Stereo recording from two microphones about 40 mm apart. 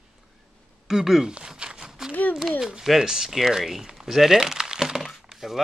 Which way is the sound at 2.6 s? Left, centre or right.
Centre.